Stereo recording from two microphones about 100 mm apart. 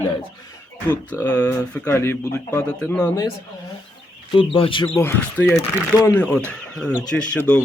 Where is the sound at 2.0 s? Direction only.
30° left (ahead or behind).